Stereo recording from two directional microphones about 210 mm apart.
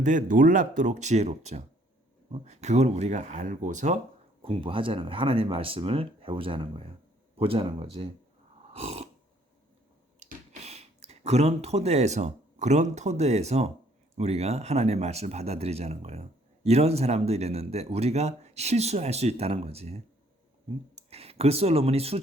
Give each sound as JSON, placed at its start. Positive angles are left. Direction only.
{"t": 0.0, "sound": "speech", "side_deg": -35}
{"t": 8.7, "sound": "snoring", "side_deg": -30}
{"t": 10.2, "sound": "speech", "side_deg": -35}